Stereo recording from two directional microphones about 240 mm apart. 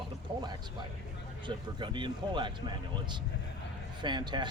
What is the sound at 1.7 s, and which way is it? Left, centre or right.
Speech, centre.